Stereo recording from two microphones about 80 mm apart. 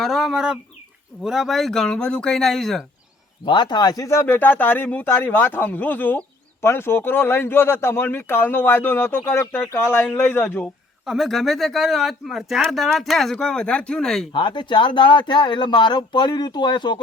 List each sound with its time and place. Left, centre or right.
0.0 s speech: centre
3.4 s speech: left
4.0 s speech: left
4.3 s speech: left
11.0 s speech: centre
14.3 s speech: left